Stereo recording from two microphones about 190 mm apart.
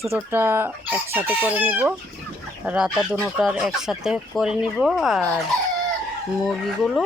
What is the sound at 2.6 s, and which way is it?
Speech, 5° right (ahead or behind).